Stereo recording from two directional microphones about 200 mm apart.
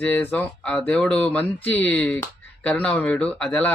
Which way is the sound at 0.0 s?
10° left (ahead or behind).